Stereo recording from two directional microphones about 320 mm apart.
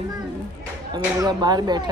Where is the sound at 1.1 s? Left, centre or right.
Centre.